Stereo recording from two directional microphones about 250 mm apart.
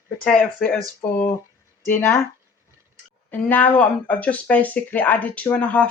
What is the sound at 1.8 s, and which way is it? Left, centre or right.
Speech, centre.